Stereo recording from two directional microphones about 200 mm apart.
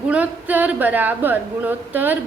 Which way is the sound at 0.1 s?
10° right (ahead or behind).